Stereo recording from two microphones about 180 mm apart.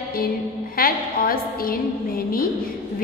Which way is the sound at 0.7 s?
55° left (ahead or behind).